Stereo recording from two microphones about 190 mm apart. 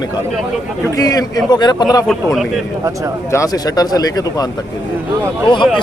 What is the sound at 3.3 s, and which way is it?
Speech, 20° left (ahead or behind).